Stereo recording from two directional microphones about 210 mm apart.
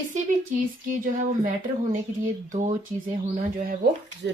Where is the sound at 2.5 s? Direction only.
35° right (ahead or behind).